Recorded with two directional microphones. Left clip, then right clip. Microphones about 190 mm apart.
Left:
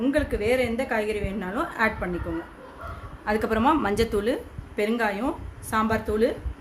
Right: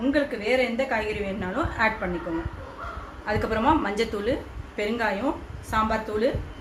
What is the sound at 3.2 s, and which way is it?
A woman's voice, 60° left (ahead or behind).